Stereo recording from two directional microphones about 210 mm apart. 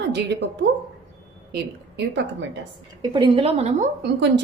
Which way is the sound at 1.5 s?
55° right (ahead or behind).